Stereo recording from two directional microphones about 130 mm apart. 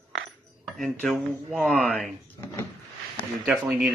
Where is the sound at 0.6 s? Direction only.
Centre (ahead or behind).